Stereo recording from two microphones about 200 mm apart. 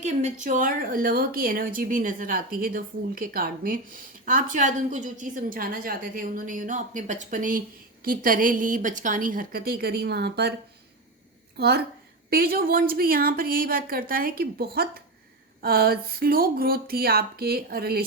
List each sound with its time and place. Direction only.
0.0 s a woman's voice: 35° right (ahead or behind); by 10.5 s 55° right (ahead or behind)
11.5 s a woman's voice: 55° right (ahead or behind)